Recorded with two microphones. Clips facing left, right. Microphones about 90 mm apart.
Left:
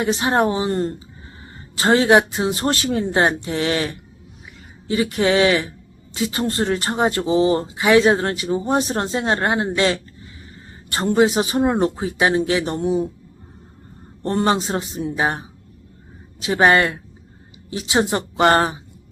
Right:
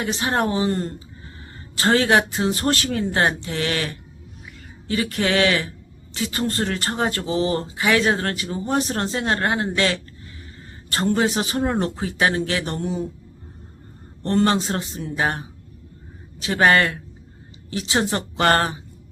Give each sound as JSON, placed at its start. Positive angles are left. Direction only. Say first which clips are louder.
{"t": 0.0, "sound": "speech", "louder": "left 4 dB", "side_deg": 20}
{"t": 14.2, "sound": "speech", "louder": "even", "side_deg": 20}